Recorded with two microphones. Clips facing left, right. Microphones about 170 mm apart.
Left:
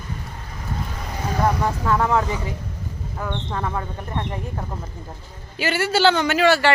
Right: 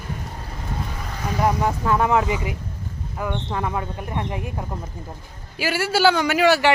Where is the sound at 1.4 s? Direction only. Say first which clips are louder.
Right 1 dB; 15° right (ahead or behind).